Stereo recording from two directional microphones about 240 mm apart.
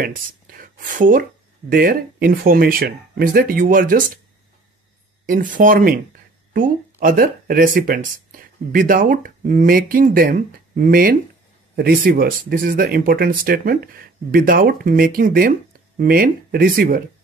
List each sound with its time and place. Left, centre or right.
0.0 s speech: right
5.2 s speech: right